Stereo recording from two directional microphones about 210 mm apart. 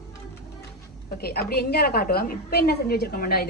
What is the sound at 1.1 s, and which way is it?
A woman's voice, 45° left (ahead or behind).